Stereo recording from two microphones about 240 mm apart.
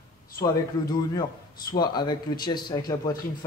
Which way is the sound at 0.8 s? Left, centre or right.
Centre.